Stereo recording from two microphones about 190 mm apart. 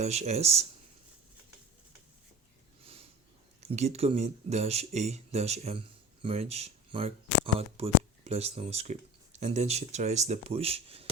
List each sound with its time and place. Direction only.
0.0 s speech: 35° right (ahead or behind)
2.8 s a sound: 30° right (ahead or behind)
3.7 s speech: 35° right (ahead or behind)